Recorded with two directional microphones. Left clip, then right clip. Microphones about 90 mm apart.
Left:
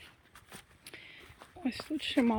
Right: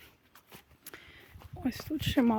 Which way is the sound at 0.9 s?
90° right.